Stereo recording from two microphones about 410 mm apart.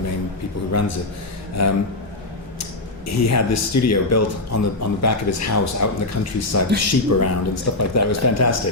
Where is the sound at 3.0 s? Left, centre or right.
Left.